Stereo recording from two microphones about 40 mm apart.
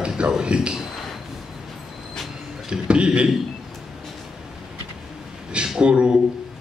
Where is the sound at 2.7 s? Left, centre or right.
Right.